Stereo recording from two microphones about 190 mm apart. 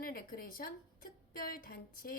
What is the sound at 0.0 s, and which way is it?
A woman's voice, 50° left (ahead or behind).